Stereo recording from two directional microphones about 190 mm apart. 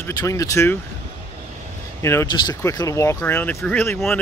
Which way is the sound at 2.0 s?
15° left (ahead or behind).